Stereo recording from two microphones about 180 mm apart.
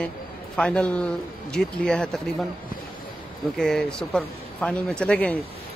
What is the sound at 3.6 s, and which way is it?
Speech, 5° left (ahead or behind).